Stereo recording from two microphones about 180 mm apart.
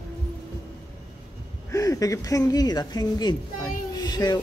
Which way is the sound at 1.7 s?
20° left (ahead or behind).